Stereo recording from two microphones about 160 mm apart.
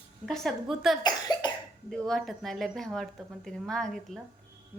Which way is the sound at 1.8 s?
Centre (ahead or behind).